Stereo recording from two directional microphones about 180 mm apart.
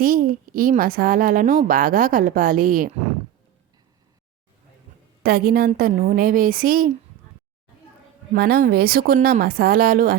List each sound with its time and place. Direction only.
0.0 s a woman's voice: 55° right (ahead or behind)
5.2 s a woman's voice: 55° right (ahead or behind)
8.3 s a woman's voice: 60° right (ahead or behind)